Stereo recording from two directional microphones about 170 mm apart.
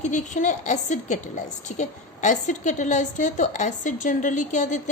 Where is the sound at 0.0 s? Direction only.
45° left (ahead or behind).